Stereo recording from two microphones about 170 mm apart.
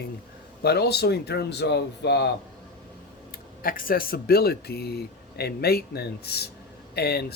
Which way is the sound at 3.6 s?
55° left (ahead or behind).